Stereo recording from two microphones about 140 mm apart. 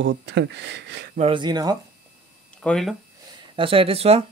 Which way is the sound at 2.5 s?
5° left (ahead or behind).